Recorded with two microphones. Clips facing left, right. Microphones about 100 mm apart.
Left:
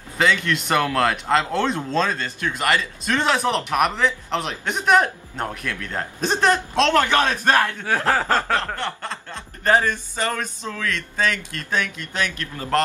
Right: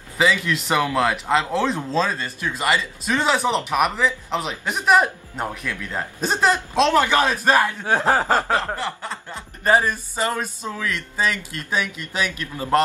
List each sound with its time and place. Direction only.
0.2 s a man's voice: 5° right (ahead or behind)
7.8 s speech: 20° right (ahead or behind)